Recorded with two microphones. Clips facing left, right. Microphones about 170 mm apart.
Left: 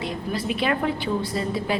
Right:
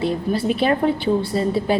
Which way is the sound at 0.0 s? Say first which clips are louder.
Right 7 dB; 35° right (ahead or behind).